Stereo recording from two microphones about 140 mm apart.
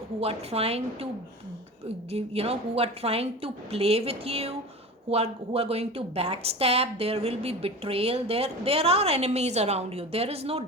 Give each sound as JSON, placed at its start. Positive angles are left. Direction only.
{"t": 0.2, "sound": "a woman's voice", "side_deg": -45}
{"t": 2.1, "sound": "a woman's voice", "side_deg": -45}